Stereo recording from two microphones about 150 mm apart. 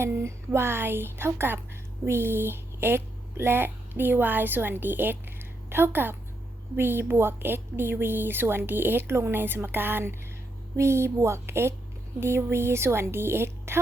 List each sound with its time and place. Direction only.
0.0 s a woman's voice: 15° right (ahead or behind)